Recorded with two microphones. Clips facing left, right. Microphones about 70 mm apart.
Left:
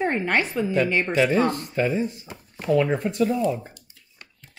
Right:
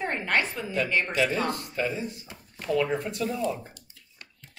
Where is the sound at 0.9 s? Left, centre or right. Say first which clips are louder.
Left 3 dB; left.